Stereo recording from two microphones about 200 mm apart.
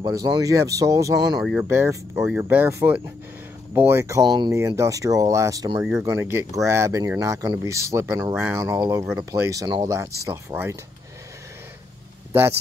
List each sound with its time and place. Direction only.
0.0 s speech: 20° right (ahead or behind)
12.3 s speech: 10° right (ahead or behind)